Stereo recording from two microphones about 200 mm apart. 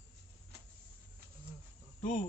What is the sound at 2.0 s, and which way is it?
Speech, 40° left (ahead or behind).